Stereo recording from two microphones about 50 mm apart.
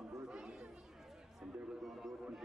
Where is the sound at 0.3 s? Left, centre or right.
Centre.